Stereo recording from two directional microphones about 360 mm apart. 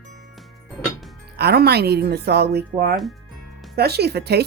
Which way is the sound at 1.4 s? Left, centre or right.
Right.